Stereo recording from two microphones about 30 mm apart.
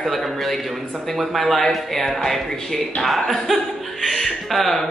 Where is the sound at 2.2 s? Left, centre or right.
Centre.